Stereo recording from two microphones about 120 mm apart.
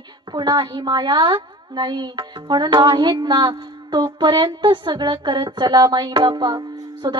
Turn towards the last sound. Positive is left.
turn(degrees=-35)  # may be behind; listen again after turning